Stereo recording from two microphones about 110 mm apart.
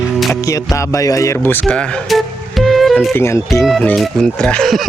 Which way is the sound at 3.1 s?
25° left (ahead or behind).